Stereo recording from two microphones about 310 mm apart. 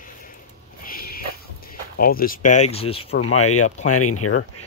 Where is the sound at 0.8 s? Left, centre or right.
Left.